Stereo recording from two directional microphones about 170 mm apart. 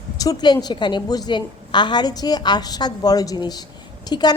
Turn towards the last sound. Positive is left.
turn(degrees=25)  # may be behind; listen again after turning